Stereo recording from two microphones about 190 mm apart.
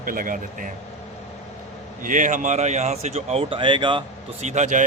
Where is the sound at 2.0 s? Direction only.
40° right (ahead or behind); by 4.0 s 25° right (ahead or behind).